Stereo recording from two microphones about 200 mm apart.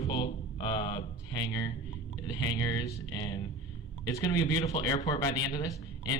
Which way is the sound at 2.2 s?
20° left (ahead or behind).